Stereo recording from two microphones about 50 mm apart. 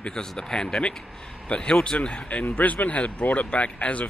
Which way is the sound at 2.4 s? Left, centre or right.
Left.